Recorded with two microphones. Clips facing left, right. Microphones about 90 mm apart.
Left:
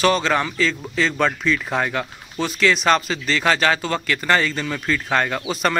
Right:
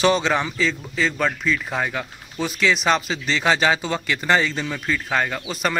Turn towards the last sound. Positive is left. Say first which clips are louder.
# left 3 dB
turn(degrees=-5)  # may be behind; listen again after turning